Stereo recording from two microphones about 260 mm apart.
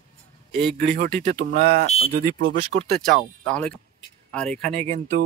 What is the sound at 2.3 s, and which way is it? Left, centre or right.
Speech, right.